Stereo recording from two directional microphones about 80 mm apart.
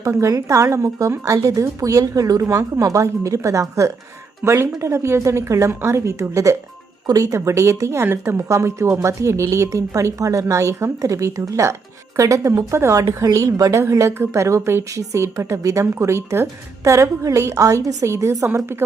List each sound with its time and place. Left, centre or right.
0.0 s a woman's voice: right
8.0 s a woman's voice: right